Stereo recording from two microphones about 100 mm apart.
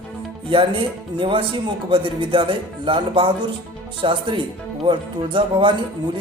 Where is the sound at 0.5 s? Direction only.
60° right (ahead or behind).